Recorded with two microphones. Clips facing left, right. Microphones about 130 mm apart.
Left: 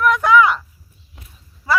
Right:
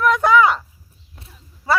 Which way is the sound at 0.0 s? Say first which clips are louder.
Left 1 dB; 30° right (ahead or behind).